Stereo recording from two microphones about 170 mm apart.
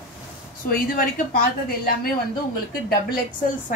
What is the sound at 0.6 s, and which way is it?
A woman's voice, 55° left (ahead or behind).